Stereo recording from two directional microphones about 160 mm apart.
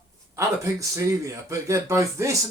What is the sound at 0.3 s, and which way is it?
Speech, 20° right (ahead or behind).